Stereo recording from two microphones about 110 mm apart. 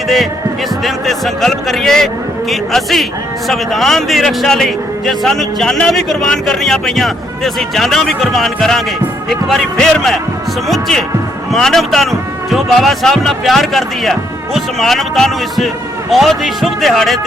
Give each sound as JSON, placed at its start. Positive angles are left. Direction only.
{"t": 0.9, "sound": "speech", "side_deg": 0}